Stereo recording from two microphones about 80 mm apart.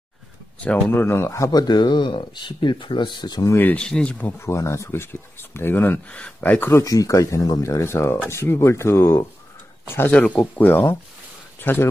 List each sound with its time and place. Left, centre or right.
0.6 s speech: centre
0.9 s speech: left
1.5 s speech: left
3.4 s speech: left
3.7 s speech: centre
4.4 s speech: left
6.0 s speech: centre
6.7 s speech: left
10.1 s speech: centre
10.4 s speech: left